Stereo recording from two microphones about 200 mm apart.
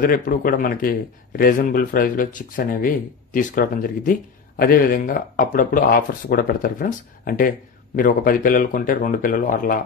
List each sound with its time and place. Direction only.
0.0 s speech: 45° left (ahead or behind)